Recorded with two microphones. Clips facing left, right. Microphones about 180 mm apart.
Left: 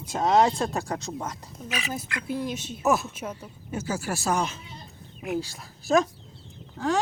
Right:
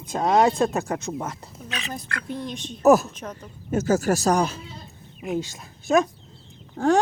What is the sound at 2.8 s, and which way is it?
Speech, 40° right (ahead or behind).